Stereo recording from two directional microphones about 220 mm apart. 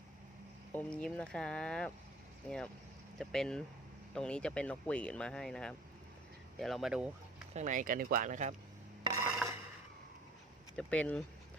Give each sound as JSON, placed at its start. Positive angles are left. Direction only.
{"t": 0.7, "sound": "speech", "side_deg": 5}
{"t": 3.2, "sound": "speech", "side_deg": 5}
{"t": 7.5, "sound": "speech", "side_deg": -35}
{"t": 9.4, "sound": "a sound", "side_deg": -5}
{"t": 10.8, "sound": "speech", "side_deg": 5}